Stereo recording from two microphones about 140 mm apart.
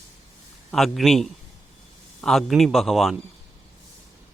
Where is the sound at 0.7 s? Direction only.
Centre (ahead or behind).